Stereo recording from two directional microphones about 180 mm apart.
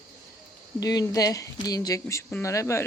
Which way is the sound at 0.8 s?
20° left (ahead or behind).